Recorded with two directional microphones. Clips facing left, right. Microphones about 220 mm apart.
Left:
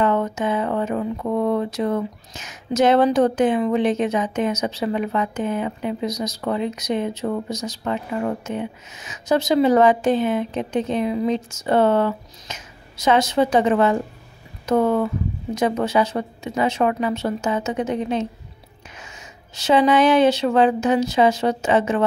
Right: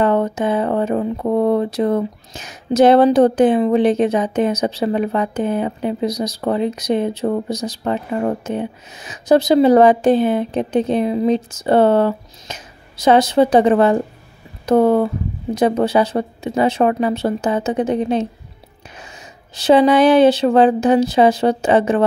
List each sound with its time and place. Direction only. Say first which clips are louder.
0.0 s speech: right 4 dB; 35° right (ahead or behind)
19.5 s speech: right 5 dB; 35° right (ahead or behind)